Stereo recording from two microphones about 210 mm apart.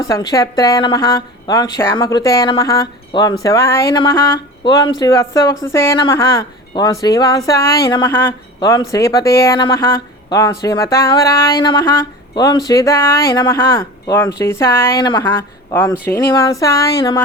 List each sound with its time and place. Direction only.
0.1 s speech: 15° left (ahead or behind)